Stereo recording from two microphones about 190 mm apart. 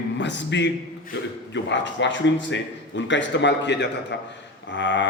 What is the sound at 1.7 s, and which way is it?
A man's voice, 70° left (ahead or behind).